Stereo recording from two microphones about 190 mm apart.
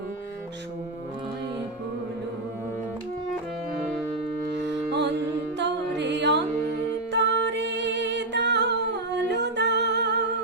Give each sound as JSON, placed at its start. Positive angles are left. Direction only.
{"t": 5.5, "sound": "music", "side_deg": -65}
{"t": 7.1, "sound": "humming", "side_deg": -70}